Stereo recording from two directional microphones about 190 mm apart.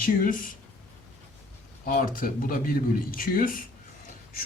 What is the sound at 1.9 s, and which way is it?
Speech, 50° left (ahead or behind).